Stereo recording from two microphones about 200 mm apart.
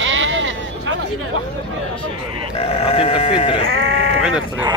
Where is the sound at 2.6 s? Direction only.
30° left (ahead or behind).